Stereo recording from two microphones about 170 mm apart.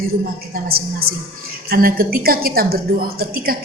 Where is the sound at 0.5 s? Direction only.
60° right (ahead or behind).